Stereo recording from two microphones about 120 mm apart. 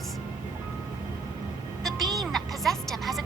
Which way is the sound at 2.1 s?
Centre (ahead or behind).